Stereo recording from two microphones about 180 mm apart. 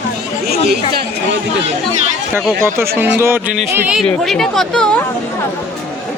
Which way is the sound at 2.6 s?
15° right (ahead or behind).